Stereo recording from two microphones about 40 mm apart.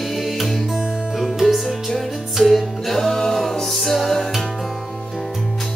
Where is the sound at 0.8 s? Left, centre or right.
Right.